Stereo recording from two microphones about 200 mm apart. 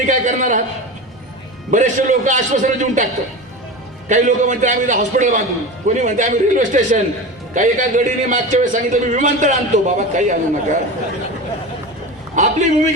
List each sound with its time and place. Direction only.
0.0 s a man's voice: 35° right (ahead or behind)
1.7 s a man's voice: 40° right (ahead or behind)
4.1 s a man's voice: 35° right (ahead or behind)
12.4 s a man's voice: 35° right (ahead or behind)